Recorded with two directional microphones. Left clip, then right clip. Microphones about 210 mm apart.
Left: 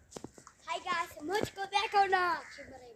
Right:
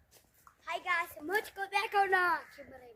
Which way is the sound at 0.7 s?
25° right (ahead or behind).